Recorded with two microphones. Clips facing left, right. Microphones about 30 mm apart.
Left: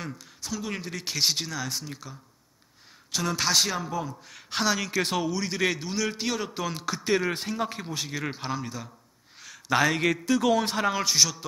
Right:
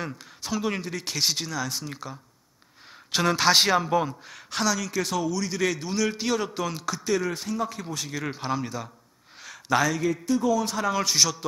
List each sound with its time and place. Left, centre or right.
0.4 s speech: right
0.7 s speech: centre
1.9 s speech: centre
3.1 s a man's voice: right
3.5 s speech: right
4.6 s speech: left
5.8 s speech: centre
7.1 s speech: left
7.8 s speech: centre
8.5 s speech: centre
9.7 s speech: centre
10.0 s speech: left
10.5 s speech: left
11.1 s speech: centre